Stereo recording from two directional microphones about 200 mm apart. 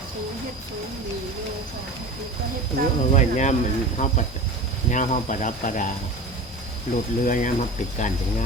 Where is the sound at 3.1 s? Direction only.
35° left (ahead or behind).